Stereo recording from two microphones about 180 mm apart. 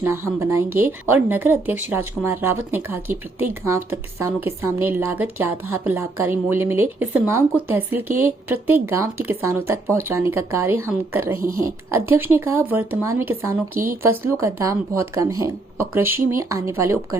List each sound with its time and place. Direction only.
0.0 s speech: 15° right (ahead or behind)